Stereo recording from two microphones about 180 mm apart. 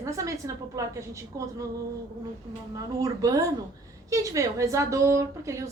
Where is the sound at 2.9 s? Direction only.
20° right (ahead or behind).